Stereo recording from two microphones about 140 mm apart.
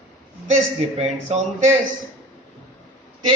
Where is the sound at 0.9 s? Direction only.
50° right (ahead or behind).